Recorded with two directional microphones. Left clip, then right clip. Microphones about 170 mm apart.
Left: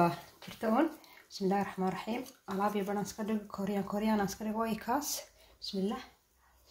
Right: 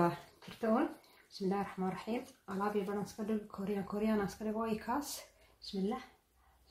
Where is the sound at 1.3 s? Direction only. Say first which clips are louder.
Left 5 dB; 40° left (ahead or behind).